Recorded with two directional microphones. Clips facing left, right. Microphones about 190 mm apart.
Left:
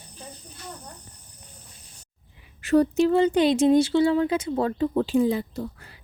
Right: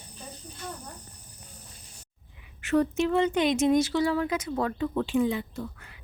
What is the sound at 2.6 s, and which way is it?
Speech, 35° left (ahead or behind).